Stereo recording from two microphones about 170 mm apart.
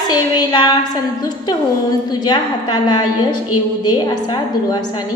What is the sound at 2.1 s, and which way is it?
A woman's voice, 25° left (ahead or behind).